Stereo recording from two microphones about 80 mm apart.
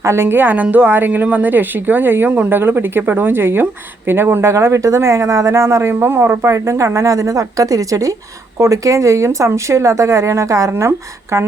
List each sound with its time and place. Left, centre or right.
0.0 s a woman's voice: right